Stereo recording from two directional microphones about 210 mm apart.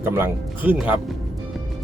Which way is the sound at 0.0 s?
10° right (ahead or behind).